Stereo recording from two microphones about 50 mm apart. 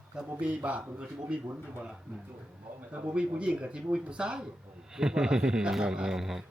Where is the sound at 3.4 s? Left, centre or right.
Right.